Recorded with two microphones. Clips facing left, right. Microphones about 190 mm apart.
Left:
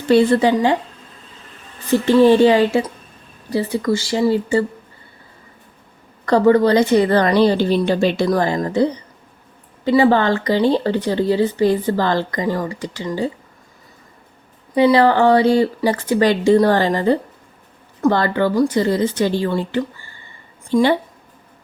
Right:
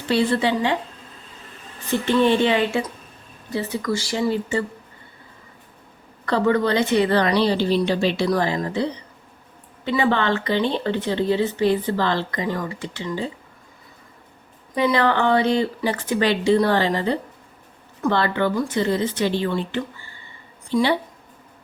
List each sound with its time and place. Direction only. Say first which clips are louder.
0.1 s a woman's voice: left 7 dB; 45° left (ahead or behind)
2.0 s speech: left 7 dB; 40° left (ahead or behind)
6.2 s a woman's voice: left 6 dB; 40° left (ahead or behind)
14.8 s speech: left 7 dB; 30° left (ahead or behind); by 20.9 s 50° left (ahead or behind)